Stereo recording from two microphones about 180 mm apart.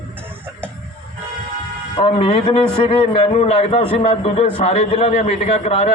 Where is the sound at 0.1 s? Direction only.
10° right (ahead or behind).